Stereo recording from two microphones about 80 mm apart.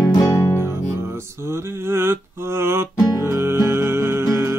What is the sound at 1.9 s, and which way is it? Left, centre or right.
Mantra, right.